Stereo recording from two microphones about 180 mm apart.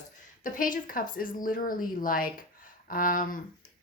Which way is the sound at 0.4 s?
50° left (ahead or behind).